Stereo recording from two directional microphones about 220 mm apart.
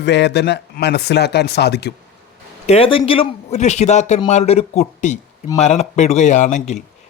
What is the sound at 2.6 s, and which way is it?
A man's voice, 25° left (ahead or behind).